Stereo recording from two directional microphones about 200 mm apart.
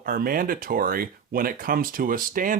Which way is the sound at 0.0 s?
45° right (ahead or behind).